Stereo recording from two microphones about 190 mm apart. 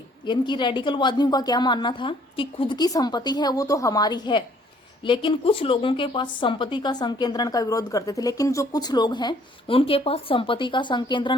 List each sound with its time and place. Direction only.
0.3 s a woman's voice: 25° left (ahead or behind)